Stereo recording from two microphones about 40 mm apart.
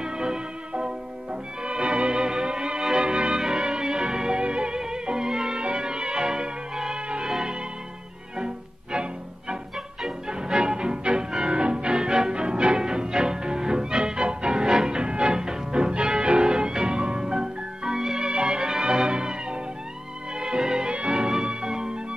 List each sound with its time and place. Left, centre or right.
0.0 s music: centre
10.5 s music: centre
18.3 s music: right